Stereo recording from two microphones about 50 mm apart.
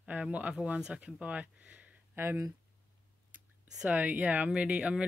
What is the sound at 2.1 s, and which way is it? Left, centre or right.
Speech, right.